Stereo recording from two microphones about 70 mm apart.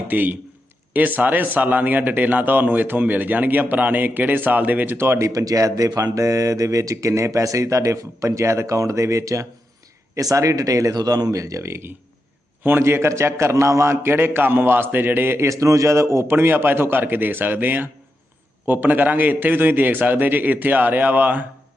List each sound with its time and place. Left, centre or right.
0.1 s speech: right
5.3 s a man's voice: right
15.4 s a man's voice: right